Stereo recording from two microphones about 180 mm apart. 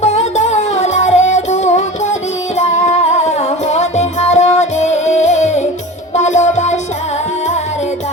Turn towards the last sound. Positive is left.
turn(degrees=40)  # may be behind; listen again after turning